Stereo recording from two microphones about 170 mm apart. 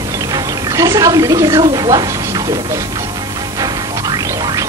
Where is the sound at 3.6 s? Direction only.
20° right (ahead or behind).